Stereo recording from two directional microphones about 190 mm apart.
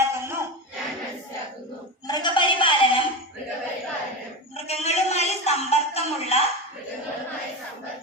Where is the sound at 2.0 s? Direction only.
25° left (ahead or behind).